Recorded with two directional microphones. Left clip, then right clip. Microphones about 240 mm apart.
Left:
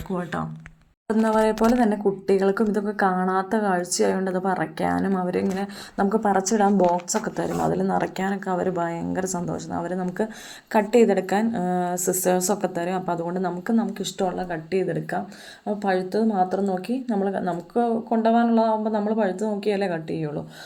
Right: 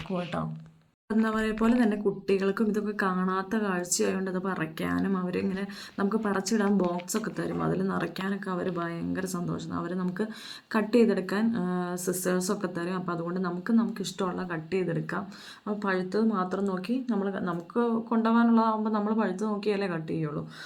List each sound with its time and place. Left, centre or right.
0.1 s a woman's voice: centre